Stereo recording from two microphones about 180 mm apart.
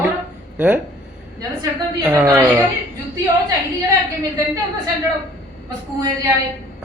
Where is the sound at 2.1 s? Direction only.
15° right (ahead or behind).